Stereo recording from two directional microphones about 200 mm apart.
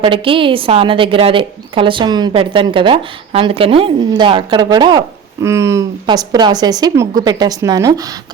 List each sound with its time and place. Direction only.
0.0 s a woman's voice: 25° right (ahead or behind)